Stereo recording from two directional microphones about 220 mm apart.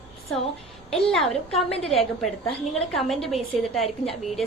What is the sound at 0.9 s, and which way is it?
Speech, centre (ahead or behind).